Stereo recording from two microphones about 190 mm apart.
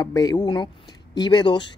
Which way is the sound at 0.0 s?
20° left (ahead or behind).